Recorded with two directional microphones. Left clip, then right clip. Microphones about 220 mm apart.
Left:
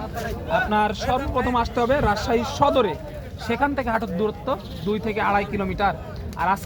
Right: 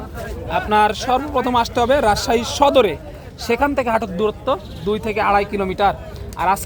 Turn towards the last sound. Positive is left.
turn(degrees=-50)  # may be behind; listen again after turning